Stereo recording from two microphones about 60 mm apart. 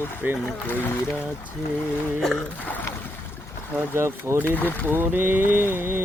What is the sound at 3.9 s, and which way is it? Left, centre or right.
Speech, right.